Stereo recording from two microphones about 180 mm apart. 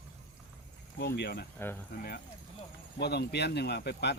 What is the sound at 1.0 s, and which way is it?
Speech, 65° left (ahead or behind).